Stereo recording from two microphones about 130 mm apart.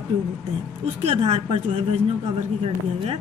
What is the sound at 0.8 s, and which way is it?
Speech, 55° right (ahead or behind).